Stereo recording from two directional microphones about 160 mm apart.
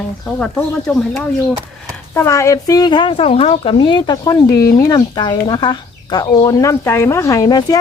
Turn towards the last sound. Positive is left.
turn(degrees=25)  # may be behind; listen again after turning